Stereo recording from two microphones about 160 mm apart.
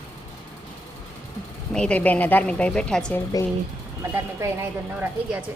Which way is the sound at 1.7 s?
5° left (ahead or behind).